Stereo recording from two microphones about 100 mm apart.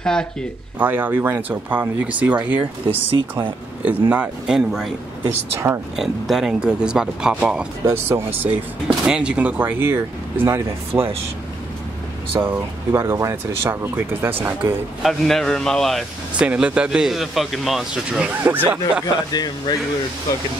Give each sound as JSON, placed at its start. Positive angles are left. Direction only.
{"t": 0.0, "sound": "speech", "side_deg": 5}
{"t": 0.7, "sound": "a man's voice", "side_deg": -20}
{"t": 7.8, "sound": "speech", "side_deg": -25}
{"t": 8.8, "sound": "a man's voice", "side_deg": -10}
{"t": 12.4, "sound": "speech", "side_deg": -25}
{"t": 15.0, "sound": "a man's voice", "side_deg": 5}
{"t": 16.3, "sound": "a man's voice", "side_deg": -10}
{"t": 19.3, "sound": "speech", "side_deg": 40}